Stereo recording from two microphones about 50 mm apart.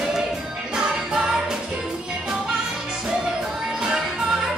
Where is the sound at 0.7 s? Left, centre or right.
Centre.